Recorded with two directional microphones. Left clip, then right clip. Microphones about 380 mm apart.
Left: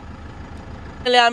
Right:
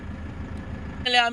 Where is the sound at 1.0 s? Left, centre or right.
Centre.